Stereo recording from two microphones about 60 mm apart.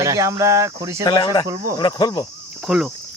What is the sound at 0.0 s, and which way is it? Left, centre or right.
Speech, right.